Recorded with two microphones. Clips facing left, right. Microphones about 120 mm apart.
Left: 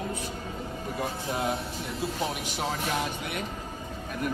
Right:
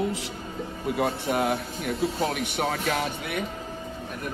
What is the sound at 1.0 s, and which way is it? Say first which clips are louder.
Speech: right 6 dB; 60° right (ahead or behind).